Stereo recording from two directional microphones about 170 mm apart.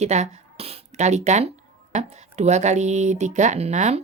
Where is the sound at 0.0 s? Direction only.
40° right (ahead or behind).